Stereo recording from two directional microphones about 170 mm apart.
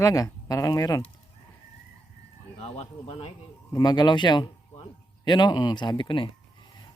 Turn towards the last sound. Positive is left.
turn(degrees=30)  # may be behind; listen again after turning